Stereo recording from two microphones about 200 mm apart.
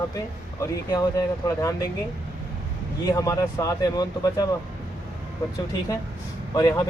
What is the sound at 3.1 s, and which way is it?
Speech, 15° left (ahead or behind).